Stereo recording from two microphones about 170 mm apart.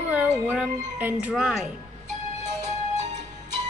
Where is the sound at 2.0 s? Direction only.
45° right (ahead or behind).